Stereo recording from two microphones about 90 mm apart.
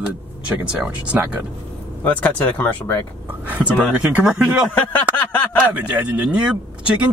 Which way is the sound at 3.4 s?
15° right (ahead or behind).